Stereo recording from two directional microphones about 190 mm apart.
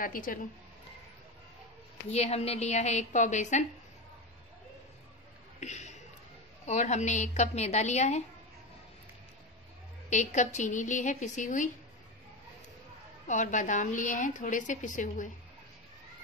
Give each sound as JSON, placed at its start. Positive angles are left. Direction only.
{"t": 0.0, "sound": "speech", "side_deg": 45}
{"t": 2.0, "sound": "a woman's voice", "side_deg": 35}
{"t": 5.6, "sound": "a sound", "side_deg": 35}
{"t": 6.6, "sound": "a woman's voice", "side_deg": 40}
{"t": 10.0, "sound": "a woman's voice", "side_deg": 40}
{"t": 13.3, "sound": "a woman's voice", "side_deg": 40}